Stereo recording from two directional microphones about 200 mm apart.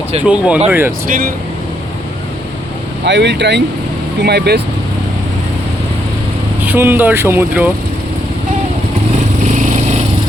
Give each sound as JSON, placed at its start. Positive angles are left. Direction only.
{"t": 0.2, "sound": "speech", "side_deg": -5}
{"t": 3.0, "sound": "speech", "side_deg": -60}
{"t": 6.7, "sound": "speech", "side_deg": -10}
{"t": 9.5, "sound": "vehicle", "side_deg": -40}